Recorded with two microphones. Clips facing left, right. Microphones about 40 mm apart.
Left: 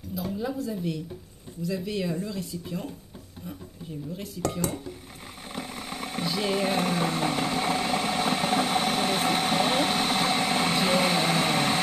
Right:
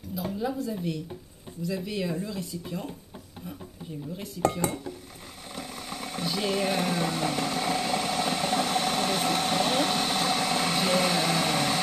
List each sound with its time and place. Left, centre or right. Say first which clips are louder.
0.1 s a woman's voice: even; centre
4.6 s speech: even; centre
5.5 s vehicle: left 2 dB; centre
6.2 s engine: left 1 dB; centre